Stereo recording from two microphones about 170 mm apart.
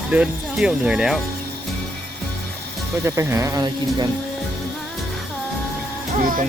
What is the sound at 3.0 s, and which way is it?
Speech, 15° right (ahead or behind).